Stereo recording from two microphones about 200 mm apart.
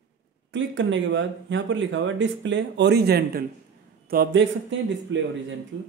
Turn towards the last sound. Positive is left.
turn(degrees=-65)  # may be behind; listen again after turning